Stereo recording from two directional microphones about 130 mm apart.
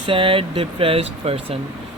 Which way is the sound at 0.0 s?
40° right (ahead or behind).